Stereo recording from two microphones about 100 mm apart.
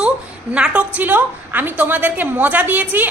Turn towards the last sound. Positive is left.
turn(degrees=-15)  # may be behind; listen again after turning